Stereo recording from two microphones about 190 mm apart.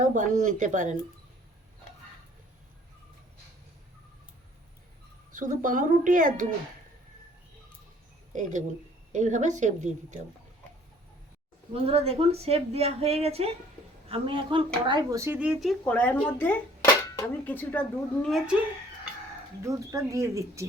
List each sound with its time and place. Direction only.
0.0 s a woman's voice: 40° right (ahead or behind)
5.3 s a woman's voice: 45° right (ahead or behind)
8.3 s a woman's voice: 40° right (ahead or behind)
11.7 s a woman's voice: 30° right (ahead or behind); by 15.7 s 5° right (ahead or behind)
15.8 s speech: 5° left (ahead or behind)
19.6 s speech: 15° right (ahead or behind)